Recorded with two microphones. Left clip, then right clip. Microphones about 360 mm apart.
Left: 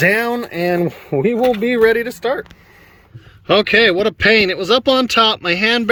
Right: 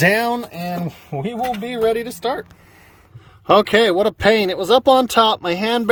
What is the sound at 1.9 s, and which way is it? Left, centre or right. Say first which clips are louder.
Speech: left 4 dB; centre.